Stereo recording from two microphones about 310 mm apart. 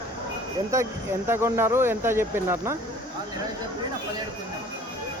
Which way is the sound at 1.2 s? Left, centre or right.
Centre.